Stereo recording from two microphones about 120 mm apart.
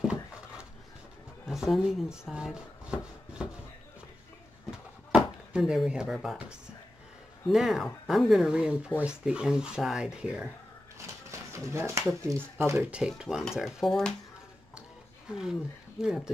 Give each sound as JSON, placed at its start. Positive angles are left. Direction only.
{"t": 0.0, "sound": "a sound", "side_deg": -5}
{"t": 1.4, "sound": "speech", "side_deg": 0}
{"t": 4.6, "sound": "drawer open or close", "side_deg": -5}
{"t": 6.1, "sound": "speech", "side_deg": 0}
{"t": 7.4, "sound": "speech", "side_deg": -5}
{"t": 11.5, "sound": "speech", "side_deg": -25}
{"t": 12.7, "sound": "speech", "side_deg": -5}
{"t": 15.2, "sound": "speech", "side_deg": -5}